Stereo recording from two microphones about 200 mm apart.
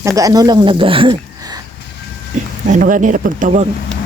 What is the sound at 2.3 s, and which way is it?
Speech, 40° right (ahead or behind).